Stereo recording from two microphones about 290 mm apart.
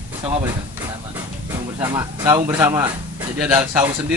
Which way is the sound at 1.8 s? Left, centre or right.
Centre.